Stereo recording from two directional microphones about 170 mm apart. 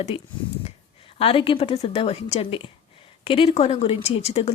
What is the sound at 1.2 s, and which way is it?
A woman's voice, 35° left (ahead or behind).